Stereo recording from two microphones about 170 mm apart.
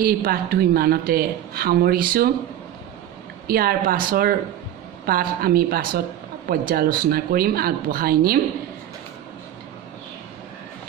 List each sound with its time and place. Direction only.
0.0 s a woman's voice: 60° right (ahead or behind)
3.4 s a woman's voice: 60° right (ahead or behind)